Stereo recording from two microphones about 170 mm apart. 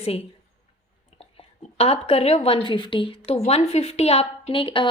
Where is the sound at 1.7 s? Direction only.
35° left (ahead or behind).